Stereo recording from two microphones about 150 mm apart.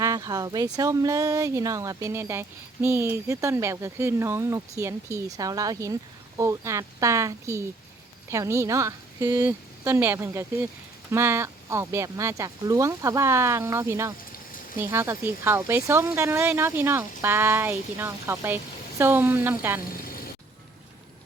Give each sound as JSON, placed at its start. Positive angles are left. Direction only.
{"t": 0.0, "sound": "speech", "side_deg": -20}
{"t": 14.3, "sound": "a sound", "side_deg": 70}
{"t": 14.8, "sound": "speech", "side_deg": -20}